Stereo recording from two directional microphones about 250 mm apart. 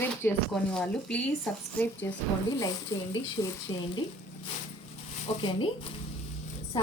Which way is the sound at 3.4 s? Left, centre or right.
Centre.